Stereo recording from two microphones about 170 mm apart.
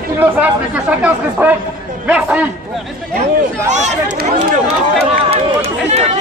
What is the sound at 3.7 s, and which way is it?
Speech, 45° right (ahead or behind).